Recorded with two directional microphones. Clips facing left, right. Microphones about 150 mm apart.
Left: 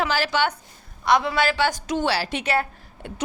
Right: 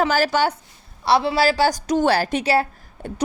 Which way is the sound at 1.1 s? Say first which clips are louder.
Right 3 dB; 30° right (ahead or behind).